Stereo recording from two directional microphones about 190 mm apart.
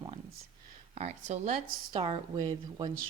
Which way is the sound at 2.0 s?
25° right (ahead or behind).